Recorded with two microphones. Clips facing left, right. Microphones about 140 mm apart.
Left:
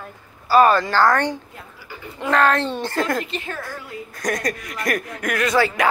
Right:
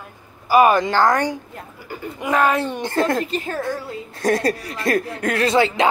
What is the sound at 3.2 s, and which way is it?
Speech, 40° right (ahead or behind).